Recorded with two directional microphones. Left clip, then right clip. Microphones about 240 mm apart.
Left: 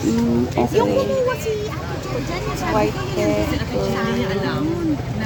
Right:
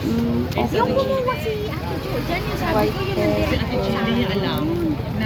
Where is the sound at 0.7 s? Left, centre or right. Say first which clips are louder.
Left 1 dB; left.